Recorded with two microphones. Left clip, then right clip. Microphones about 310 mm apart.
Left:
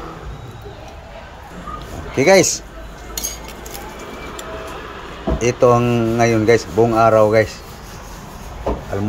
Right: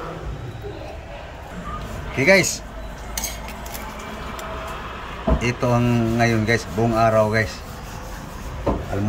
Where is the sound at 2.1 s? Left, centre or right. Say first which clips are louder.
Left 4 dB; centre.